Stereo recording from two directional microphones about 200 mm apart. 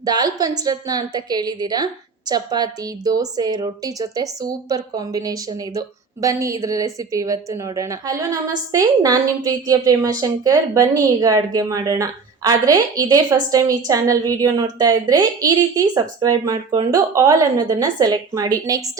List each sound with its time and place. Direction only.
0.0 s a woman's voice: 20° right (ahead or behind)